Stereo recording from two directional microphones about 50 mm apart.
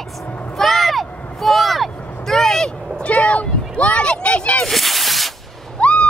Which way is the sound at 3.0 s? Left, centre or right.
Left.